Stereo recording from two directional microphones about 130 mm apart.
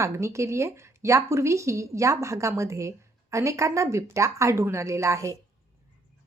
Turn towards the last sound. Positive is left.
turn(degrees=-25)  # may be behind; listen again after turning